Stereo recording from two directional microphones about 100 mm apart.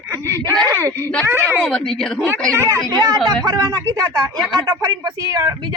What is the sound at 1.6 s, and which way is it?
Speech, 5° left (ahead or behind).